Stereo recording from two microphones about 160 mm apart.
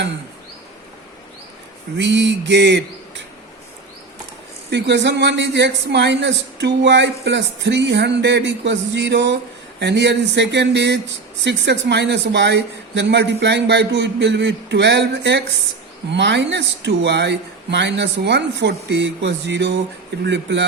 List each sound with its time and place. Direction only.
2.0 s a man's voice: 90° right
4.7 s a man's voice: 90° right